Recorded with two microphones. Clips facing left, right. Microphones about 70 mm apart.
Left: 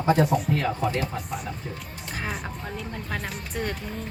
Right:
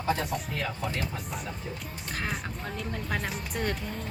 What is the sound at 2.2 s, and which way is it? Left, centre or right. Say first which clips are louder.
Speech: left 2 dB; centre.